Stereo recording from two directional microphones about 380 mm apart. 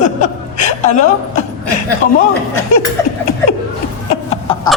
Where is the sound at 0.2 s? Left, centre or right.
Centre.